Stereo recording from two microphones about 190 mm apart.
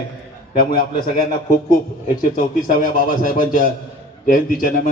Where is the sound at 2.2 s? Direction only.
45° left (ahead or behind).